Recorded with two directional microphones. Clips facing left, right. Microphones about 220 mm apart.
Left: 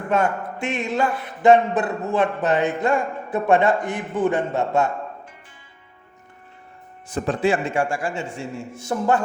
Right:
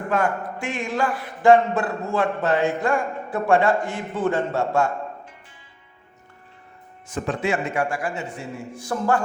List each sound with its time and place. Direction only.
0.1 s speech: 25° left (ahead or behind)
7.1 s speech: 35° left (ahead or behind)